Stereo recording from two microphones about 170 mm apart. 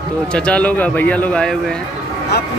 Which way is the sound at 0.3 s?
5° left (ahead or behind).